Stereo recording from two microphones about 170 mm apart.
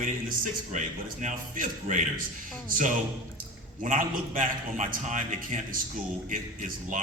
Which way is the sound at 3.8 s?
50° right (ahead or behind).